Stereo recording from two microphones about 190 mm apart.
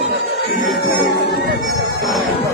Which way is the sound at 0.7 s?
60° left (ahead or behind).